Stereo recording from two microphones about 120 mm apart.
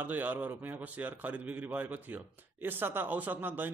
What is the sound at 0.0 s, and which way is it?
Speech, 15° right (ahead or behind).